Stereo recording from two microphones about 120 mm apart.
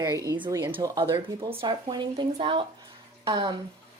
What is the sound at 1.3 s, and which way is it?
Speech, 45° right (ahead or behind).